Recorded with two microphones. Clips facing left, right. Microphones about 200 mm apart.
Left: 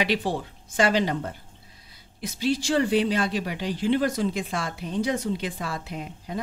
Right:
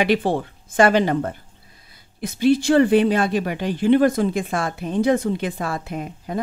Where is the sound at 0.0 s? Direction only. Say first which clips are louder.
Right 6 dB; 55° right (ahead or behind).